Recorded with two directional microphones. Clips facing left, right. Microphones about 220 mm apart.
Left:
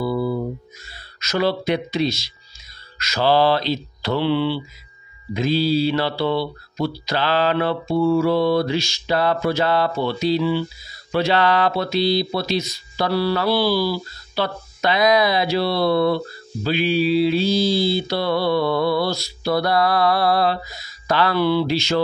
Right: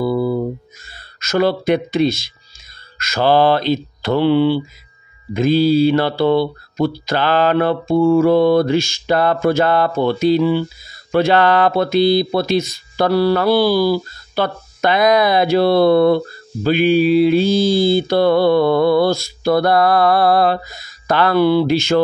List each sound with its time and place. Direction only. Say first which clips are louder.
0.0 s music: right 4 dB; 50° right (ahead or behind)
0.8 s speech: right 2 dB; 50° right (ahead or behind)